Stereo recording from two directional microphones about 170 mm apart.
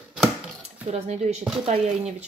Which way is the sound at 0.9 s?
40° right (ahead or behind).